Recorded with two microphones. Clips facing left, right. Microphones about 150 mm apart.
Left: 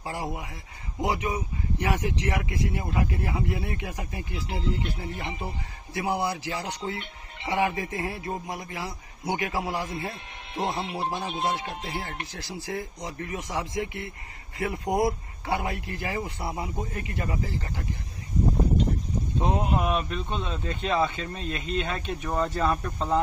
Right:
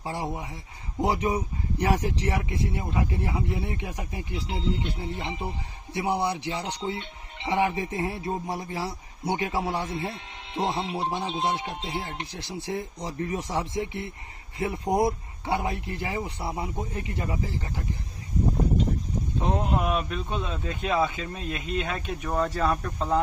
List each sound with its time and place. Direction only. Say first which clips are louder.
0.0 s a man's voice: right 1 dB; 20° right (ahead or behind)
1.0 s speech: right 2 dB; 35° right (ahead or behind)
2.8 s a man's voice: even; 20° right (ahead or behind)
19.4 s speech: left 1 dB; 10° left (ahead or behind)
19.7 s speech: even; centre (ahead or behind)